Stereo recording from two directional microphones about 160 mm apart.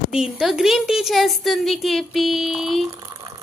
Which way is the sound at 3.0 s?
25° right (ahead or behind).